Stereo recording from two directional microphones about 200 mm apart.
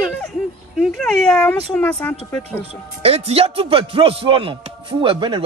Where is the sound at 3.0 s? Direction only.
30° right (ahead or behind).